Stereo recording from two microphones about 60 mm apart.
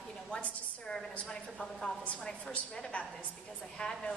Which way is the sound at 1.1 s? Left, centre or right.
Centre.